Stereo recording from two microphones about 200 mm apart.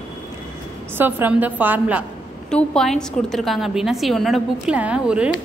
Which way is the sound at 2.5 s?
5° left (ahead or behind).